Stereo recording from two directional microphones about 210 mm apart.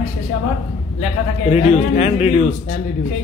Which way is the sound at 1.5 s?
30° left (ahead or behind).